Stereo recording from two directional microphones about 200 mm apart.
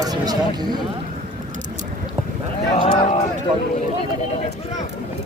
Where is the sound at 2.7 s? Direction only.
30° left (ahead or behind).